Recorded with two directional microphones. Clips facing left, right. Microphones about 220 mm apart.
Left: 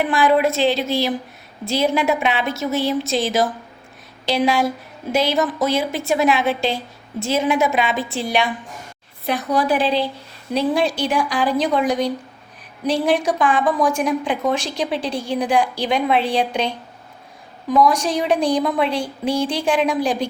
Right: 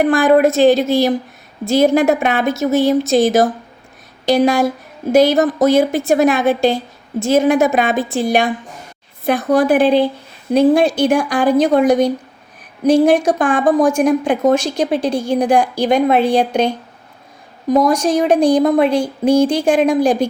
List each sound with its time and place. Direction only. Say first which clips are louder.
0.0 s a woman's voice: right 6 dB; 45° right (ahead or behind)
17.8 s a woman's voice: right 5 dB; 45° right (ahead or behind)